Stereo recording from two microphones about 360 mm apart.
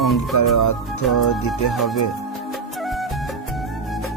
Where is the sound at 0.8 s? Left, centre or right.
Centre.